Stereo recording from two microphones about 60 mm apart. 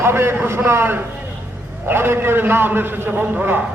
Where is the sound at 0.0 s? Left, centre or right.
Right.